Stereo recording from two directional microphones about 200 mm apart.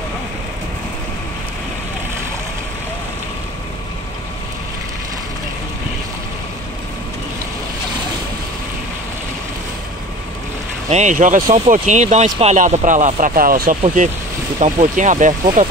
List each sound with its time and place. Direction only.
10.9 s speech: 35° right (ahead or behind)